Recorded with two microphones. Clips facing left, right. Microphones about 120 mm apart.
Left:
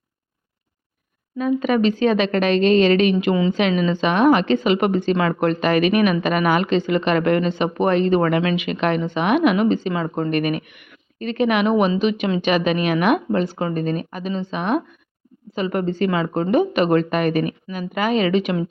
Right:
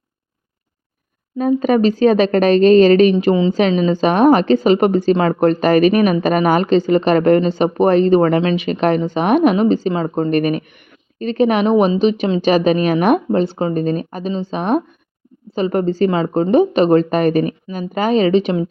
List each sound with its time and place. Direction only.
1.4 s a woman's voice: 40° right (ahead or behind)